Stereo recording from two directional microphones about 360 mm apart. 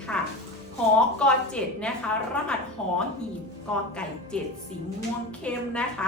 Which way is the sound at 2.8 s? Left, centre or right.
Centre.